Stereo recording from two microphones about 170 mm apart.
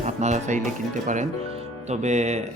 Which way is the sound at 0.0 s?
40° right (ahead or behind).